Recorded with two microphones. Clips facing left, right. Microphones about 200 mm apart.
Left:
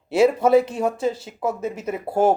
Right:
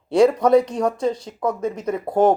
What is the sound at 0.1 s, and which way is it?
Speech, 5° left (ahead or behind).